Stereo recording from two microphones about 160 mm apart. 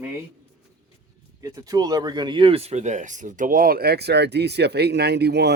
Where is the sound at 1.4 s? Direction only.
20° right (ahead or behind).